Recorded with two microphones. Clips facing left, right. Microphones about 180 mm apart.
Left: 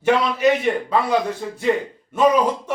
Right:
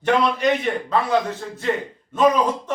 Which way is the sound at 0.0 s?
10° left (ahead or behind).